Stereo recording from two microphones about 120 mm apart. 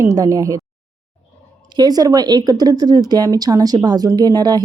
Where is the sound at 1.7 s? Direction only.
35° right (ahead or behind).